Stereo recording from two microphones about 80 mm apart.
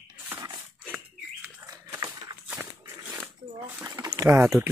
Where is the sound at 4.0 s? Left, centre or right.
Right.